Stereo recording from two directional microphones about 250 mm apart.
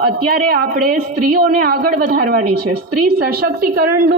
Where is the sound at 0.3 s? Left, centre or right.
Right.